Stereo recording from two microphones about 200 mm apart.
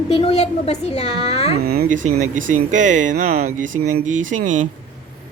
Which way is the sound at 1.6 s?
50° right (ahead or behind).